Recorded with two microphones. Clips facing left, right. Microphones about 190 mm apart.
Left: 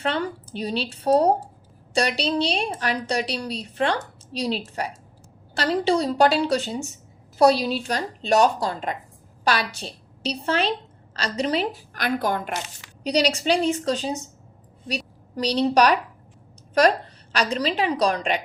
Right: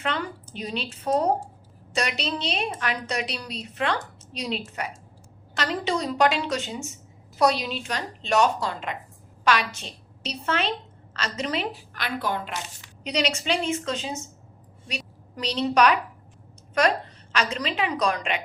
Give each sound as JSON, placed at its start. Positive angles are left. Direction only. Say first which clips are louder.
{"t": 0.0, "sound": "a woman's voice", "louder": "left 4 dB", "side_deg": 35}
{"t": 17.3, "sound": "a woman's voice", "louder": "left 4 dB", "side_deg": 35}